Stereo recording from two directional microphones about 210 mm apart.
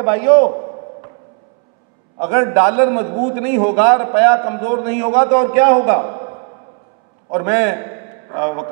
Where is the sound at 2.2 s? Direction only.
15° right (ahead or behind).